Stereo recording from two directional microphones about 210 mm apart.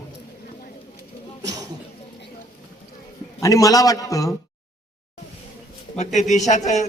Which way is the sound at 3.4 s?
15° left (ahead or behind).